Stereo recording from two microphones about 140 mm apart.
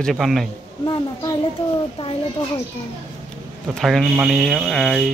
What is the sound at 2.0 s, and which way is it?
Speech, 40° left (ahead or behind).